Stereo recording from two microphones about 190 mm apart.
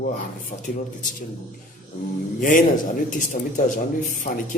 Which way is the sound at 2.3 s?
45° left (ahead or behind).